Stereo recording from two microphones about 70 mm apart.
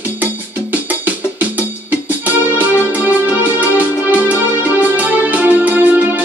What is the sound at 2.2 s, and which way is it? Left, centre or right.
Music, right.